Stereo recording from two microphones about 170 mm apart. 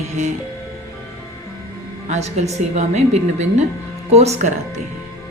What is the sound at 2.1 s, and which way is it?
A woman's voice, 40° right (ahead or behind).